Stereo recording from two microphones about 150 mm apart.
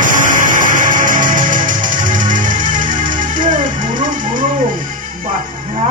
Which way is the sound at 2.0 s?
60° right (ahead or behind).